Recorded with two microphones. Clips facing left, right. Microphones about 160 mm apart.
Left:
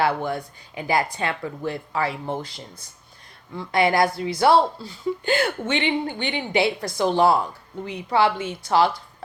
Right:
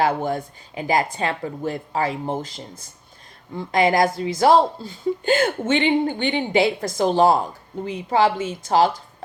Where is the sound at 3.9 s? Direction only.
45° right (ahead or behind).